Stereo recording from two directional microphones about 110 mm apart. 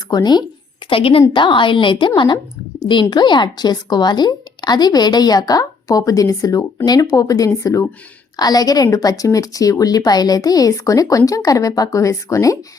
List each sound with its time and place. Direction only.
0.1 s speech: 40° left (ahead or behind)
0.9 s a woman's voice: 55° left (ahead or behind)
1.3 s a woman's voice: 45° left (ahead or behind); by 12.5 s 30° left (ahead or behind)